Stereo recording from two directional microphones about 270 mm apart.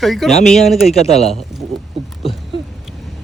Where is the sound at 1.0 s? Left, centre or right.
Left.